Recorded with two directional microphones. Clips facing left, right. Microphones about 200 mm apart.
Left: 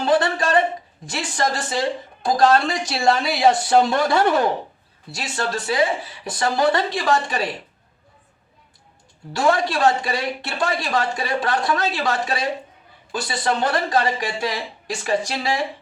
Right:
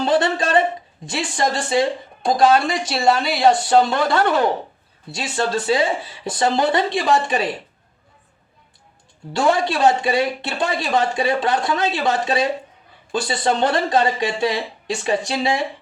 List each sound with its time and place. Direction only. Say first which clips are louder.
0.0 s speech: right 1 dB; 25° right (ahead or behind)
2.4 s speech: right 1 dB; 5° right (ahead or behind)
5.1 s speech: right 4 dB; 25° right (ahead or behind)
9.4 s speech: right 1 dB; 20° right (ahead or behind)